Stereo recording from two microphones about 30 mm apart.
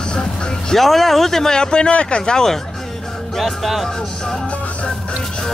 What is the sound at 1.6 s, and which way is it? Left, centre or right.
Speech, left.